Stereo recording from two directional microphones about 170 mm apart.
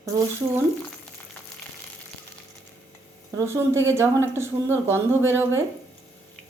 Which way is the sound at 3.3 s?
15° right (ahead or behind).